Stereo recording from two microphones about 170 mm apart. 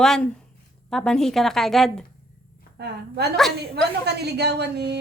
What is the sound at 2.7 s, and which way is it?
A woman's voice, 75° right (ahead or behind).